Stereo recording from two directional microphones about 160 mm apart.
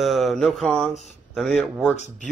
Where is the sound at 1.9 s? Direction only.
45° left (ahead or behind).